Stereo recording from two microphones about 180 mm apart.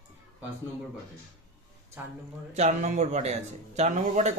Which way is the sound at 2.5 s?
40° right (ahead or behind).